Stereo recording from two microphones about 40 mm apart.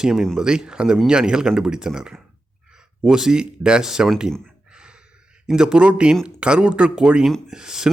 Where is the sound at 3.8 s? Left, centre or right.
Centre.